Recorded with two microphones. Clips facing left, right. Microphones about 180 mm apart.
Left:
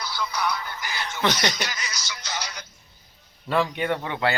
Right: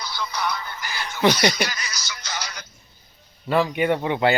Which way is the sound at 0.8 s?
15° left (ahead or behind).